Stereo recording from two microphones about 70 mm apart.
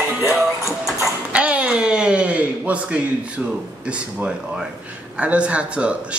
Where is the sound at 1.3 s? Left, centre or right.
Centre.